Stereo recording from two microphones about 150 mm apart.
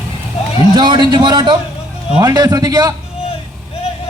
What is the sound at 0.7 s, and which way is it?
A man's voice, 30° right (ahead or behind).